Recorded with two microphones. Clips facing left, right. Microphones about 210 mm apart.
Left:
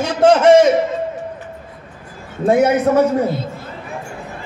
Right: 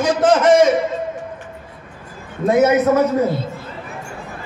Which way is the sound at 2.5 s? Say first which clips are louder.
Even; 30° left (ahead or behind).